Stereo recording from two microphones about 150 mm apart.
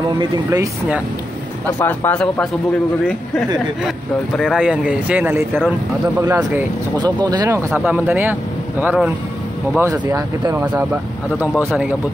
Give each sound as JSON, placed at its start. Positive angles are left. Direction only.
{"t": 1.7, "sound": "speech", "side_deg": 10}
{"t": 4.4, "sound": "speech", "side_deg": 0}
{"t": 10.6, "sound": "speech", "side_deg": -10}